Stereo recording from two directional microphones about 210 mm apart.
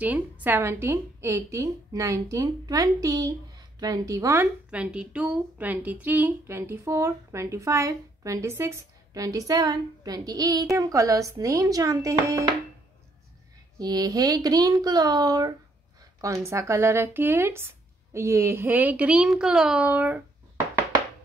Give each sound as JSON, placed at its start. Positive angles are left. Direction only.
{"t": 0.0, "sound": "a woman's voice", "side_deg": -5}
{"t": 13.7, "sound": "a woman's voice", "side_deg": -20}